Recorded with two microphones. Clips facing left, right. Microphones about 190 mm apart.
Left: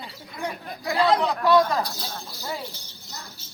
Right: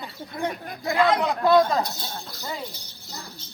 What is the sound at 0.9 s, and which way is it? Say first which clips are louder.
Speech: even; 35° left (ahead or behind).